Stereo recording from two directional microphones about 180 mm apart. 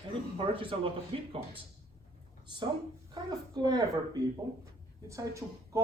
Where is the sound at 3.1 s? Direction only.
20° right (ahead or behind).